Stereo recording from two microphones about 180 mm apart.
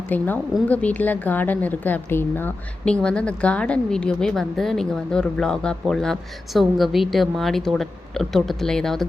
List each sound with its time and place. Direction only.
0.1 s a woman's voice: 10° left (ahead or behind)